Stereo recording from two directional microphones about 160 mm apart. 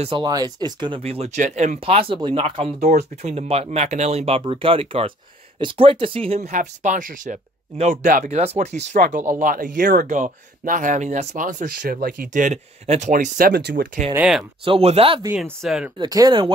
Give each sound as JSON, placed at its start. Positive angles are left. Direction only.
{"t": 0.0, "sound": "speech", "side_deg": -30}
{"t": 2.8, "sound": "speech", "side_deg": -45}
{"t": 6.5, "sound": "speech", "side_deg": -50}
{"t": 13.5, "sound": "speech", "side_deg": -85}
{"t": 14.1, "sound": "speech", "side_deg": -5}
{"t": 14.6, "sound": "speech", "side_deg": -35}
{"t": 15.6, "sound": "speech", "side_deg": 0}
{"t": 16.0, "sound": "speech", "side_deg": -25}